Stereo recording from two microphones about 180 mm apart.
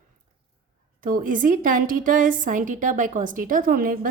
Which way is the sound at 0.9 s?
50° right (ahead or behind).